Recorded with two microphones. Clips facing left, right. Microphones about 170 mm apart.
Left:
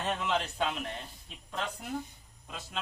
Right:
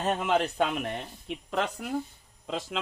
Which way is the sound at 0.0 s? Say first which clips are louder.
Right 6 dB; 45° right (ahead or behind).